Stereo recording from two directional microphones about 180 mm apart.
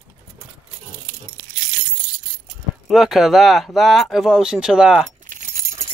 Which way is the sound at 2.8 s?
Centre (ahead or behind).